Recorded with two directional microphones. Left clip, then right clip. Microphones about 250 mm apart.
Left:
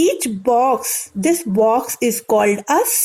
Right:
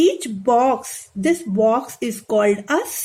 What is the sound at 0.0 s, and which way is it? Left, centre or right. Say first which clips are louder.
Speech: left 1 dB; centre.